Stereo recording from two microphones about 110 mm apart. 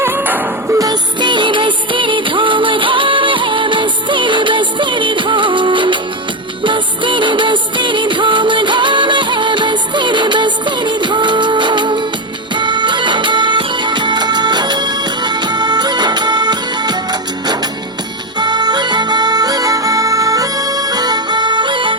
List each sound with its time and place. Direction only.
0.0 s music: 20° right (ahead or behind)
0.8 s music: 40° right (ahead or behind)